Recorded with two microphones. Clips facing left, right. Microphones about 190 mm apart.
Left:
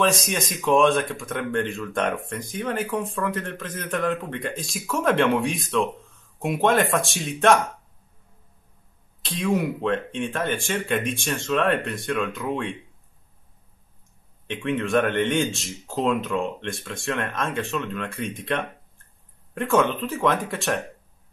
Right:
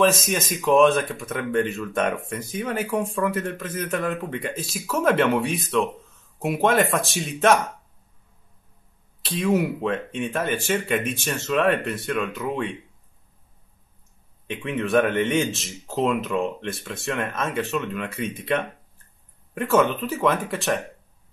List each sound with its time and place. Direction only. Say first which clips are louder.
0.0 s speech: right 2 dB; centre (ahead or behind)
9.2 s speech: right 2 dB; 5° right (ahead or behind)
14.5 s speech: right 1 dB; centre (ahead or behind)